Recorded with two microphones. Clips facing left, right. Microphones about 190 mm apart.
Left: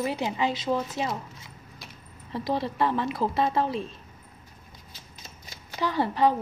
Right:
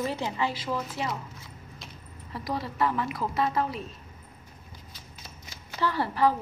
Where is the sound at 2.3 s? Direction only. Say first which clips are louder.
Left 3 dB; 25° left (ahead or behind).